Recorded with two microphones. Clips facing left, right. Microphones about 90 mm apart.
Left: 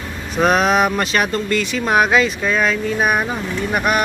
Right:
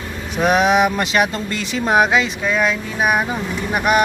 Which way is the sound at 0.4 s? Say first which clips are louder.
Even; 10° right (ahead or behind).